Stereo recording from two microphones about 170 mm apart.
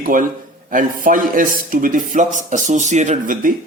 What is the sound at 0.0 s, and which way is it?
A man's voice, 55° right (ahead or behind).